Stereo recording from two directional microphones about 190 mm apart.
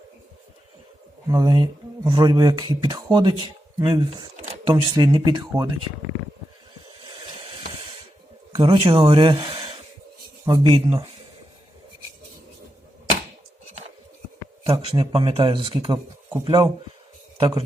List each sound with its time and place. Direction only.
1.3 s speech: 20° right (ahead or behind)
7.4 s a sound: 30° right (ahead or behind)
8.5 s speech: 25° right (ahead or behind)
14.7 s speech: 30° right (ahead or behind)